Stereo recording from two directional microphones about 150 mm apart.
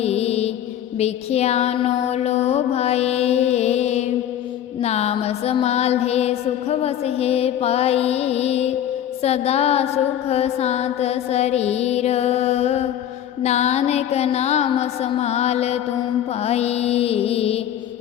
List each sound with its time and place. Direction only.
0.0 s music: 45° left (ahead or behind)
0.9 s mantra: 45° left (ahead or behind)
4.8 s music: 45° left (ahead or behind)